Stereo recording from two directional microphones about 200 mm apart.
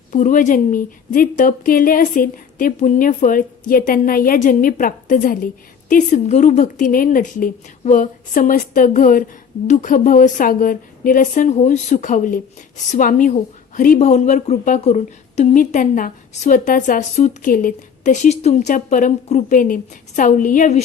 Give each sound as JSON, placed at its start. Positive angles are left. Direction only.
{"t": 0.1, "sound": "a woman's voice", "side_deg": 40}